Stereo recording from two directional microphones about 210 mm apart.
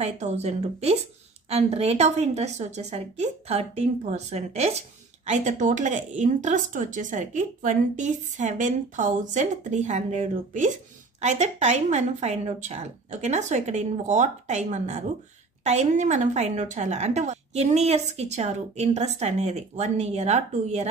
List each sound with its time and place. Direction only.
0.0 s a woman's voice: 30° right (ahead or behind)